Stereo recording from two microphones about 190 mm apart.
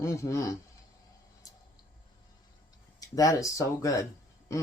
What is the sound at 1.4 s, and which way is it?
Tick-tock, 20° left (ahead or behind).